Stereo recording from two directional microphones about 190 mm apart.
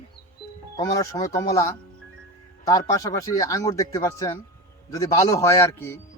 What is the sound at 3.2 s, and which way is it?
Speech, 15° left (ahead or behind).